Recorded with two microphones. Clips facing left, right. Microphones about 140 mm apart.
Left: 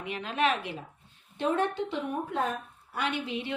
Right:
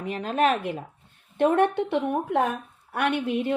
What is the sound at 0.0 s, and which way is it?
Speech, 40° right (ahead or behind).